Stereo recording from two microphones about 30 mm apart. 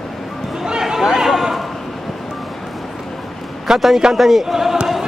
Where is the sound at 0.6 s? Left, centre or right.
Right.